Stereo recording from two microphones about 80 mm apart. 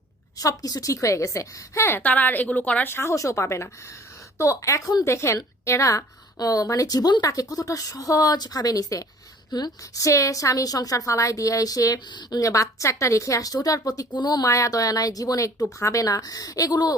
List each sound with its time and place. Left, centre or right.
0.3 s a woman's voice: left; by 2.9 s centre
2.9 s a woman's voice: left
14.1 s speech: left
14.4 s a woman's voice: left